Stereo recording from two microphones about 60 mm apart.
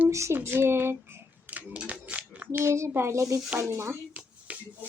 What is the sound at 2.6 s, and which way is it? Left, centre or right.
Speech, right.